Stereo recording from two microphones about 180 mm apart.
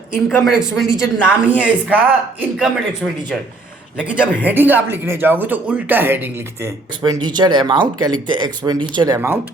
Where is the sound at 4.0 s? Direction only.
5° right (ahead or behind).